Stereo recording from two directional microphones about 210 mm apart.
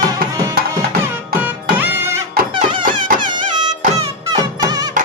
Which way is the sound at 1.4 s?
10° right (ahead or behind).